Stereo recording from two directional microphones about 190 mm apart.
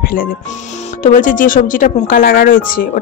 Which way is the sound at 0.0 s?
50° left (ahead or behind).